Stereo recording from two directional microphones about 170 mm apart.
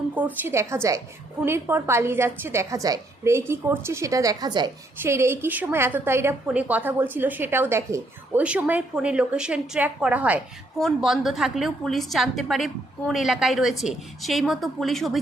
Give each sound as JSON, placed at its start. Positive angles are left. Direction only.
{"t": 0.1, "sound": "a woman's voice", "side_deg": -10}